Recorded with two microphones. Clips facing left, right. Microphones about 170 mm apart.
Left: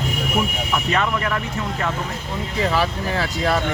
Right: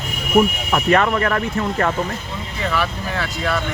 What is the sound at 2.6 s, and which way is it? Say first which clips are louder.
Speech: left 1 dB; 35° left (ahead or behind).